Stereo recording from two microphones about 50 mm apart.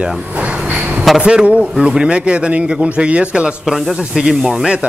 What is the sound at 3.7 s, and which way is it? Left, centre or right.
A man's voice, centre.